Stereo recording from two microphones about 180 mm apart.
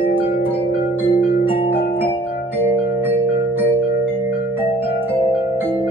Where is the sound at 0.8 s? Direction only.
10° right (ahead or behind).